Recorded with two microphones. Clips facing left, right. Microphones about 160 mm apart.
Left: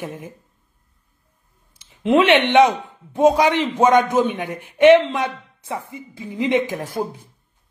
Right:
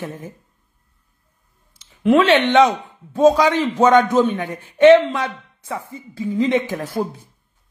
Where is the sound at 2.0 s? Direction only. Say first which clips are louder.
Right 1 dB; 20° left (ahead or behind).